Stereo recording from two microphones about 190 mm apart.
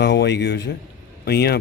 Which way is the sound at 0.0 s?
65° left (ahead or behind).